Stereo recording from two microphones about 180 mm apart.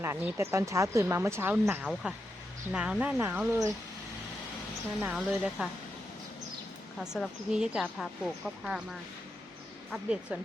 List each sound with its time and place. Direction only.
0.0 s speech: 15° right (ahead or behind)
5.1 s speech: 5° right (ahead or behind)
7.0 s speech: 5° right (ahead or behind)